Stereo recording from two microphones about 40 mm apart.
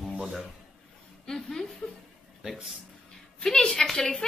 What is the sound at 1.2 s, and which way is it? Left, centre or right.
Speech, centre.